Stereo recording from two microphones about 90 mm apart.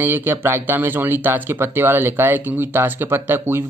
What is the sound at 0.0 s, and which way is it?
Speech, 25° right (ahead or behind).